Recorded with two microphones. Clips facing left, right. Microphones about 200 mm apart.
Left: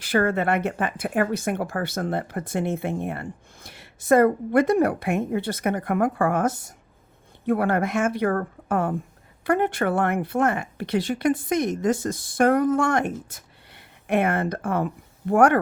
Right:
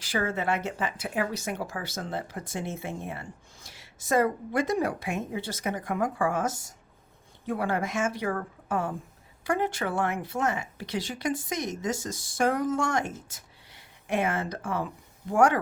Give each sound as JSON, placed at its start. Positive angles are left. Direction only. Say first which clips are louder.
{"t": 0.0, "sound": "speech", "louder": "left 7 dB", "side_deg": 60}